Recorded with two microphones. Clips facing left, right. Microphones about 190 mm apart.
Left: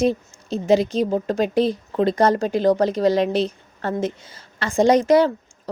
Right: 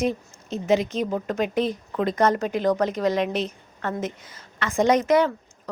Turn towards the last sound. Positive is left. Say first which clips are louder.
# left 4 dB
turn(degrees=30)  # may be behind; listen again after turning